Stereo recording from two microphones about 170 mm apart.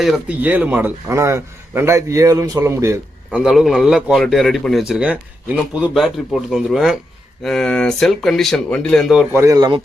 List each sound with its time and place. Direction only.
0.0 s a man's voice: 5° right (ahead or behind)
3.2 s a man's voice: centre (ahead or behind)
9.3 s speech: 15° right (ahead or behind)